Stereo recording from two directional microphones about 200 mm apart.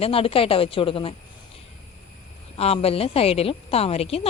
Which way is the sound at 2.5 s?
30° left (ahead or behind).